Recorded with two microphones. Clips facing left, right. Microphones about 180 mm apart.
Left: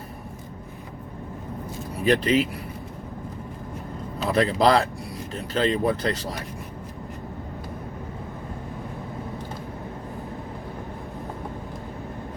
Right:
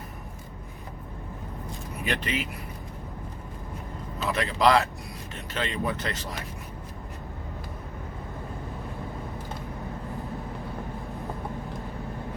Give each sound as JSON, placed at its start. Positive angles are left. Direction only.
{"t": 2.0, "sound": "speech", "side_deg": 35}
{"t": 4.2, "sound": "speech", "side_deg": 35}